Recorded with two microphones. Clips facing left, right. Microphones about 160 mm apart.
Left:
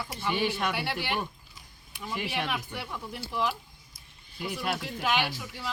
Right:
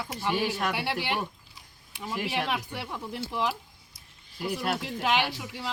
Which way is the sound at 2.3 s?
25° right (ahead or behind).